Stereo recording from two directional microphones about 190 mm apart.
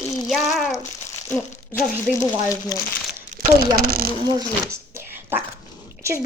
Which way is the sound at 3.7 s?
50° right (ahead or behind).